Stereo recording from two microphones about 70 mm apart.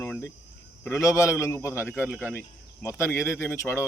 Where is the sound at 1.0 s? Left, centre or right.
Left.